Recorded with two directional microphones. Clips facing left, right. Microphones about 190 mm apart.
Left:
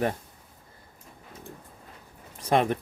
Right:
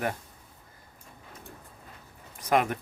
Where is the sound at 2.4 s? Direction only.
30° left (ahead or behind).